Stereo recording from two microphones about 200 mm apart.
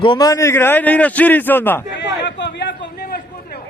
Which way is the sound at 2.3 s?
60° left (ahead or behind).